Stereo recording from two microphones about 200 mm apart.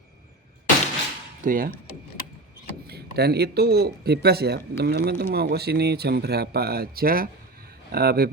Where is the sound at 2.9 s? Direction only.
55° right (ahead or behind).